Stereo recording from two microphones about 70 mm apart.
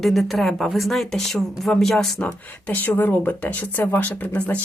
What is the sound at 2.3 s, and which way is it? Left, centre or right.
Speech, left.